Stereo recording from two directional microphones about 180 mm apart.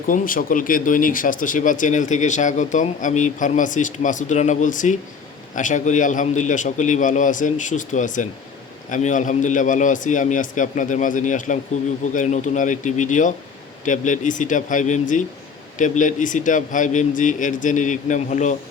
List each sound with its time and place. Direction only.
0.1 s speech: 50° left (ahead or behind)